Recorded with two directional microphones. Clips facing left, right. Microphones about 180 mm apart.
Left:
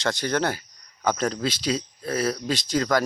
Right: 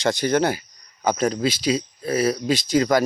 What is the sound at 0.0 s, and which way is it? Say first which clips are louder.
Speech: right 5 dB; 10° right (ahead or behind).